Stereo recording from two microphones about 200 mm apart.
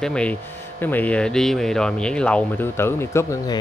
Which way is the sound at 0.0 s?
5° left (ahead or behind).